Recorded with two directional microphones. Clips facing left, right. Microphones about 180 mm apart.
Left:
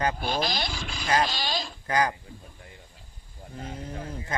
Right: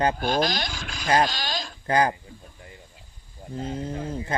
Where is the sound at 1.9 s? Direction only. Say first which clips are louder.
Right 4 dB; 30° right (ahead or behind).